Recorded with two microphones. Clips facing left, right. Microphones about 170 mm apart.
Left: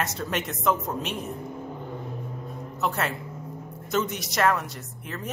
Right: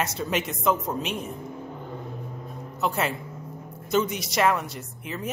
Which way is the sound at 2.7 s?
Centre (ahead or behind).